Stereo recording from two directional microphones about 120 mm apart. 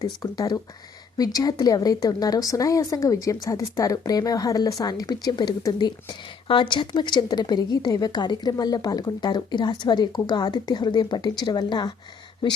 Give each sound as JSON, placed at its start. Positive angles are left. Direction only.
{"t": 0.2, "sound": "a woman's voice", "side_deg": 30}